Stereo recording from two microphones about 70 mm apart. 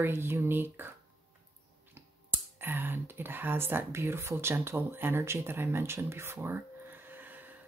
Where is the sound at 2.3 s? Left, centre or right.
Right.